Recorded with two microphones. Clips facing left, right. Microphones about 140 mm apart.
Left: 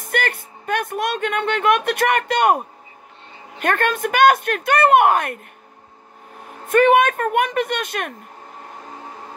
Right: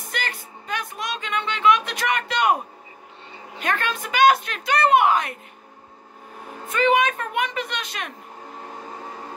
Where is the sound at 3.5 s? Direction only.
55° left (ahead or behind).